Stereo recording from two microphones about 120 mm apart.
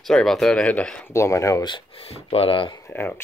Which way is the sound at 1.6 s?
45° left (ahead or behind).